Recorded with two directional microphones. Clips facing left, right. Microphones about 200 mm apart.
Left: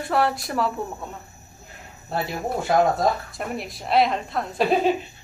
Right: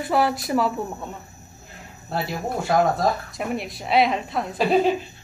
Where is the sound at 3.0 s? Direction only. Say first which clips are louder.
Even; centre (ahead or behind).